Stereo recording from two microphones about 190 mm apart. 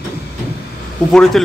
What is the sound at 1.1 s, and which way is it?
Speech, centre (ahead or behind).